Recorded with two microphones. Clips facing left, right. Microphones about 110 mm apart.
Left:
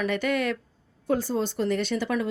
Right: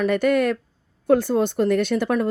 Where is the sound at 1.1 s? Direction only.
60° right (ahead or behind).